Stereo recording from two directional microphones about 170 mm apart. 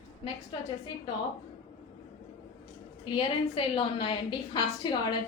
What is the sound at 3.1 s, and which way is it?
A woman's voice, 30° left (ahead or behind).